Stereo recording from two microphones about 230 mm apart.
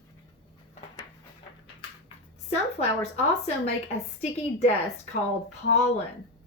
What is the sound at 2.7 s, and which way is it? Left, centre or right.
A woman's voice, left.